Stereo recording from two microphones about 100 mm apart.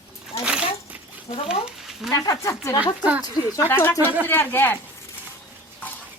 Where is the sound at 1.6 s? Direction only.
5° right (ahead or behind).